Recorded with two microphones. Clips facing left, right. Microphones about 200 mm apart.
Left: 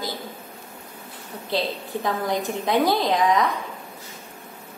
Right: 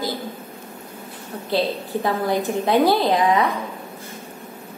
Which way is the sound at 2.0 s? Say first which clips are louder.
Right 3 dB; 5° right (ahead or behind).